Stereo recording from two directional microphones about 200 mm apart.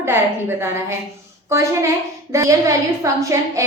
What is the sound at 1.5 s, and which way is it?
A woman's voice, 15° right (ahead or behind).